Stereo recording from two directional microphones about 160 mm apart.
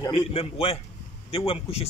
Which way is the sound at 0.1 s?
40° left (ahead or behind).